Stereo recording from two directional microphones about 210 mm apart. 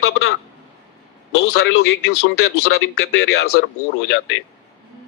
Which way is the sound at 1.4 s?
50° left (ahead or behind).